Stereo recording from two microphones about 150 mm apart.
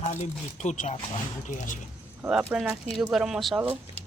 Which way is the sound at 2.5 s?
10° right (ahead or behind).